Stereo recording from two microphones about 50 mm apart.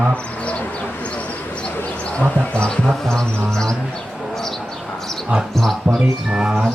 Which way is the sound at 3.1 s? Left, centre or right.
Centre.